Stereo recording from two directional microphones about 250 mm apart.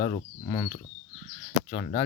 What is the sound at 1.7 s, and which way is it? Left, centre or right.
Speech, left.